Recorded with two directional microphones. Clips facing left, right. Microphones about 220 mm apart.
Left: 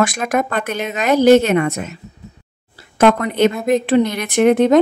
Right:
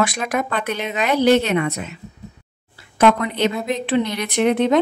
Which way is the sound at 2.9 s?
45° left (ahead or behind).